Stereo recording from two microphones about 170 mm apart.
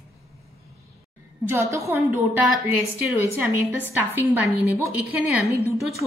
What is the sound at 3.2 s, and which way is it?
A woman's voice, 10° right (ahead or behind).